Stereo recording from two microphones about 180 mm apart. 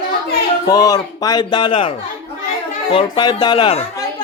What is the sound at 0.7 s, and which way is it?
A man's voice, 20° left (ahead or behind).